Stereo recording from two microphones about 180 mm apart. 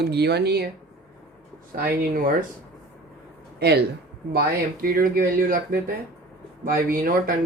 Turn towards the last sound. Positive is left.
turn(degrees=-50)  # may be behind; listen again after turning